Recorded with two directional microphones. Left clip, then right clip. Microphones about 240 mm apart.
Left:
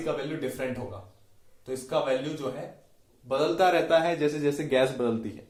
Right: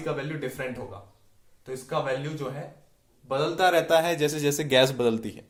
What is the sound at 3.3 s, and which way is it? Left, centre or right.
A man's voice, right.